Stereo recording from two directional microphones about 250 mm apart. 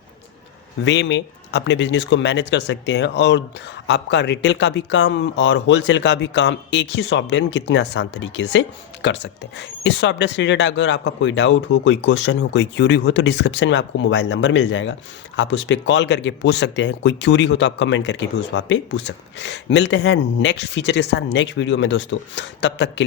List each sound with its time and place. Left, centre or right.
0.9 s speech: left